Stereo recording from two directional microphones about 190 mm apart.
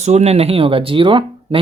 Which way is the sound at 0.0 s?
35° right (ahead or behind).